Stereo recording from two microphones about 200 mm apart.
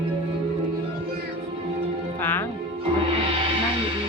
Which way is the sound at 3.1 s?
25° right (ahead or behind).